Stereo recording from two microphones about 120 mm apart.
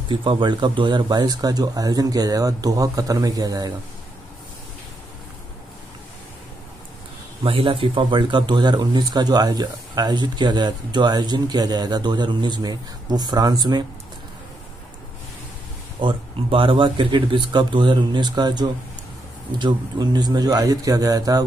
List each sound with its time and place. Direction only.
0.1 s speech: 45° right (ahead or behind)
7.4 s speech: 50° right (ahead or behind)
16.0 s speech: 45° right (ahead or behind); by 21.5 s 30° right (ahead or behind)